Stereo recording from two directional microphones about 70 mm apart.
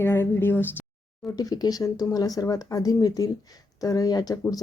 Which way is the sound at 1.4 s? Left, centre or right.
Left.